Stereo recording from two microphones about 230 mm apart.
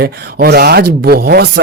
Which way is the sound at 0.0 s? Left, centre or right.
Right.